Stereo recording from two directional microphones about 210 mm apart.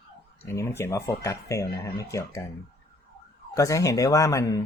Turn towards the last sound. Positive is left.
turn(degrees=15)  # may be behind; listen again after turning